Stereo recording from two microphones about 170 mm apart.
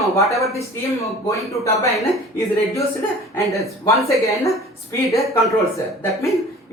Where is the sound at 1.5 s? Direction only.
20° left (ahead or behind).